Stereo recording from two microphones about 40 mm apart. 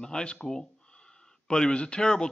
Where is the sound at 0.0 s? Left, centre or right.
Left.